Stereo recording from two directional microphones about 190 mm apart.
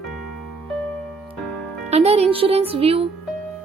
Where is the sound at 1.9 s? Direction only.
35° right (ahead or behind).